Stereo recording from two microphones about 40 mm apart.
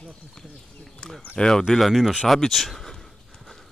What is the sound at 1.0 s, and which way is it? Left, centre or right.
Speech, left.